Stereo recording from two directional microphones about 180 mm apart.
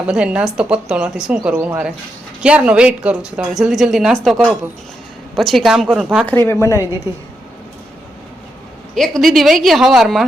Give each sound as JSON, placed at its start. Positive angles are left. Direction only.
{"t": 0.1, "sound": "speech", "side_deg": -5}
{"t": 6.5, "sound": "a woman's voice", "side_deg": 15}
{"t": 9.0, "sound": "speech", "side_deg": 0}